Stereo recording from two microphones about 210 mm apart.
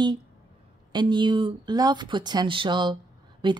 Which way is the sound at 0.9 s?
20° right (ahead or behind).